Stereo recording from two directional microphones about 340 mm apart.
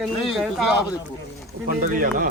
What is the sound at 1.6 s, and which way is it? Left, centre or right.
Speech, right.